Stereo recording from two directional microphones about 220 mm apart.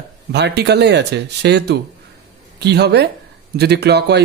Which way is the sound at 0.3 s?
50° right (ahead or behind).